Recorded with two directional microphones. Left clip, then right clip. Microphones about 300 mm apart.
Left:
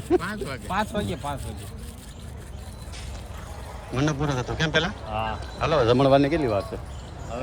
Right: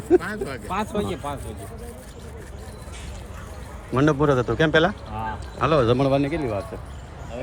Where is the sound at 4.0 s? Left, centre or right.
Centre.